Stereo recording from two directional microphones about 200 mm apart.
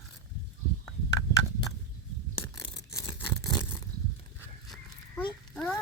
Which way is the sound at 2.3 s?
25° left (ahead or behind).